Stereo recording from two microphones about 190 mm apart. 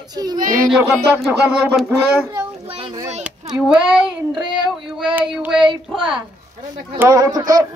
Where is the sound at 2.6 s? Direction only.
30° right (ahead or behind).